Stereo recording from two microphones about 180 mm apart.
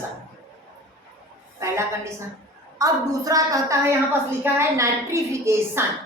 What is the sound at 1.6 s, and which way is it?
A woman's voice, 15° right (ahead or behind).